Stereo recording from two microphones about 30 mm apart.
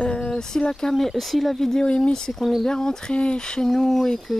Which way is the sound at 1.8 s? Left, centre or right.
Left.